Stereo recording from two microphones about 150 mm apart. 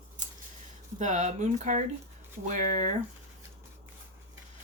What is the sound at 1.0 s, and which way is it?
A woman's voice, 55° right (ahead or behind).